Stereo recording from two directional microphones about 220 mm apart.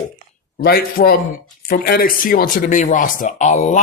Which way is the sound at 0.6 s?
45° left (ahead or behind).